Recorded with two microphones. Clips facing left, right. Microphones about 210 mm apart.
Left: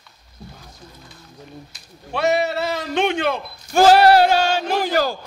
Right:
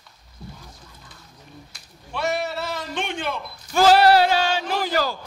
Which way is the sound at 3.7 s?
50° left (ahead or behind).